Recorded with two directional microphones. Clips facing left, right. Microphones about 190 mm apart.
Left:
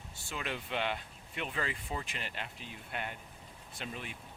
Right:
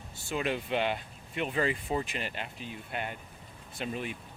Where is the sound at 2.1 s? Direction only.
10° right (ahead or behind).